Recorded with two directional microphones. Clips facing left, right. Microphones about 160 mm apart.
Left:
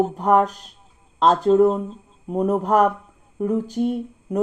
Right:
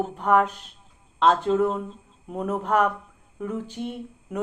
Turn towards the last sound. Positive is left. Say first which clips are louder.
# left 9 dB
turn(degrees=40)  # may be behind; listen again after turning